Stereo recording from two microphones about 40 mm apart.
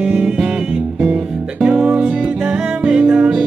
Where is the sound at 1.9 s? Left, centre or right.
Right.